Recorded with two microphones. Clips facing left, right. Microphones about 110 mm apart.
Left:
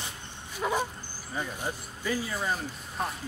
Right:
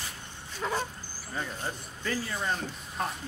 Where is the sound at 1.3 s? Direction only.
10° left (ahead or behind).